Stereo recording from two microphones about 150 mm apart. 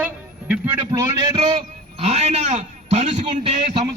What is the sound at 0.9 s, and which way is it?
Speech, 25° right (ahead or behind).